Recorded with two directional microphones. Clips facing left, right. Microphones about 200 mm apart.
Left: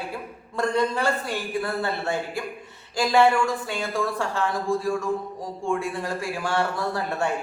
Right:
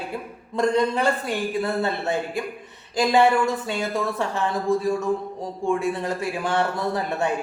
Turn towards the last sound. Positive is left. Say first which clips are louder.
# right 2 dB
turn(degrees=-20)  # may be behind; listen again after turning